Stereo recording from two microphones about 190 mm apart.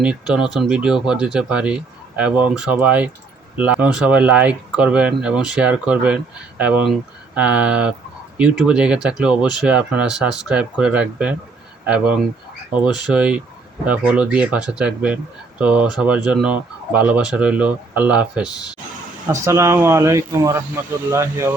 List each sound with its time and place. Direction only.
0.0 s speech: 5° right (ahead or behind)